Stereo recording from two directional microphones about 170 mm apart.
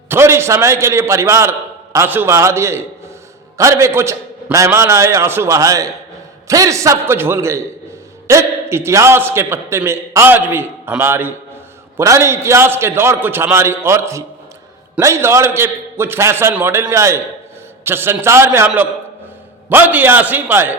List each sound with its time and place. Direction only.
0.1 s a man's voice: 15° right (ahead or behind)